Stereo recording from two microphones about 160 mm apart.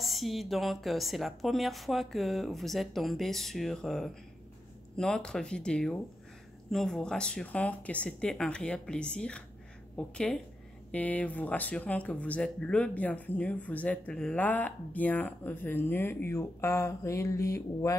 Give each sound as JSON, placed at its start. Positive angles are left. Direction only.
{"t": 0.0, "sound": "a woman's voice", "side_deg": 0}